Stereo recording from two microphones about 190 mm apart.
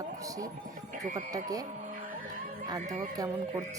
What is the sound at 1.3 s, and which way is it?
Speech, 20° right (ahead or behind).